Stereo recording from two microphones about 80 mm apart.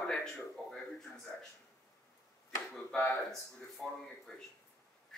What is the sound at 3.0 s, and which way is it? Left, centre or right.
Speech, centre.